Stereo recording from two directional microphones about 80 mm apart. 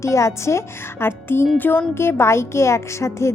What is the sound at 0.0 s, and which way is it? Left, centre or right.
Speech, left.